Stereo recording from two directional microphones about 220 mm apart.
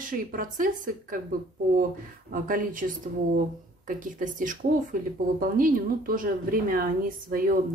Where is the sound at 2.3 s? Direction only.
40° right (ahead or behind).